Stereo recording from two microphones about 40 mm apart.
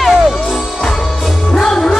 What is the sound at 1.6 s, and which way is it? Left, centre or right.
Music, centre.